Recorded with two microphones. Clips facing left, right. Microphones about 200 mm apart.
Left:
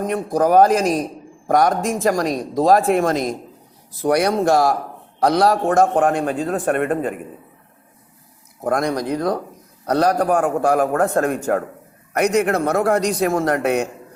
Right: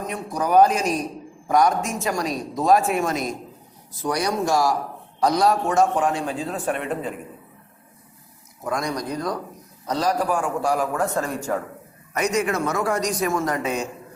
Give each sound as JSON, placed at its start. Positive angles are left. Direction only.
{"t": 0.1, "sound": "a man's voice", "side_deg": 50}
{"t": 8.6, "sound": "a man's voice", "side_deg": 55}